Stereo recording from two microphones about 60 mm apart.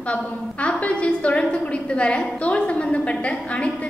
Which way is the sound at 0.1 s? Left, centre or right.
Left.